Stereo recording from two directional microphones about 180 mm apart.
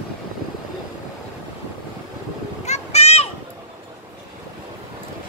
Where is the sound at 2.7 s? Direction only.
35° left (ahead or behind).